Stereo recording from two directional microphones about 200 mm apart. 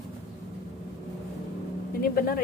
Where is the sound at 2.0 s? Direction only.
45° left (ahead or behind).